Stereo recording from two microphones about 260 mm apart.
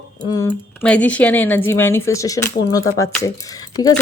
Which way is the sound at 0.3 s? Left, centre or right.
Centre.